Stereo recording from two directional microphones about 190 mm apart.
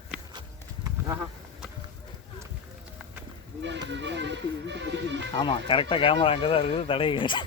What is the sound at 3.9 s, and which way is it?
Music, 70° right (ahead or behind).